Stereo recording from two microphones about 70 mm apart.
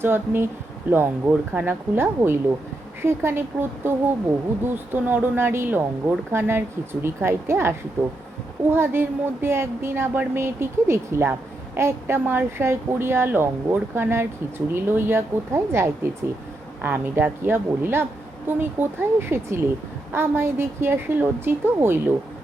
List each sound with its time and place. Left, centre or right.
0.0 s a woman's voice: right
16.8 s a woman's voice: right